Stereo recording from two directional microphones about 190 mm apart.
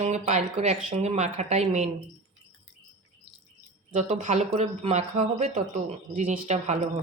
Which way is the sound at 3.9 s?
35° right (ahead or behind).